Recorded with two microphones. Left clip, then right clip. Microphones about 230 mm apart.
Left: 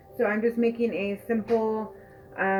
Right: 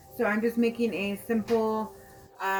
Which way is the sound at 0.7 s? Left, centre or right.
Right.